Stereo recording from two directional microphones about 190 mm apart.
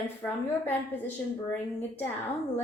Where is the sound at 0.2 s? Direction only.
10° left (ahead or behind).